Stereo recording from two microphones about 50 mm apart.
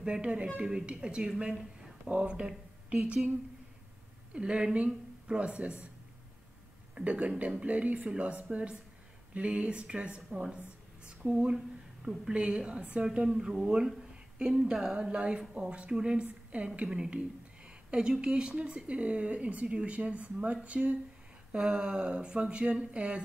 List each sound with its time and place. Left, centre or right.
0.0 s speech: right
1.5 s speech: centre
2.0 s speech: right
4.3 s speech: right
7.0 s speech: right
11.5 s a sound: centre
12.3 s speech: centre
18.2 s speech: centre
21.5 s speech: centre